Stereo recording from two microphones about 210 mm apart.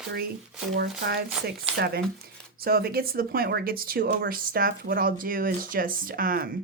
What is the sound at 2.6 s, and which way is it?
Speech, 45° right (ahead or behind).